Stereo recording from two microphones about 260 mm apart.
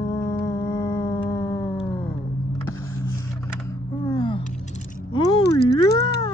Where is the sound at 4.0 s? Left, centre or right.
Centre.